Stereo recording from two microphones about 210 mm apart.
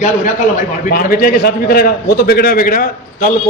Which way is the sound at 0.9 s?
45° left (ahead or behind).